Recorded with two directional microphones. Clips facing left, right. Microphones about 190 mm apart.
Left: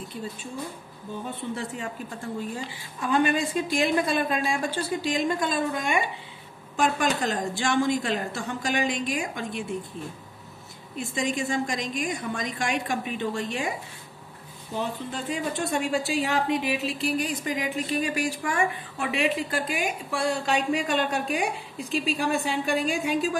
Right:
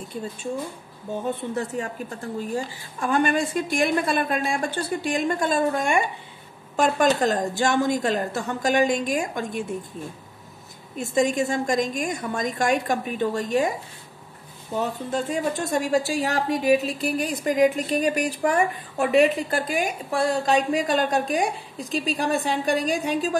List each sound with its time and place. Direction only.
1.2 s a woman's voice: 40° right (ahead or behind)
11.0 s a woman's voice: 45° right (ahead or behind)
15.0 s a woman's voice: 45° right (ahead or behind)